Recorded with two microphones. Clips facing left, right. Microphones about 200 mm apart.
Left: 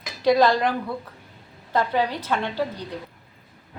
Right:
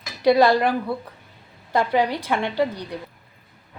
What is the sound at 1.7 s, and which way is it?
Speech, 15° right (ahead or behind).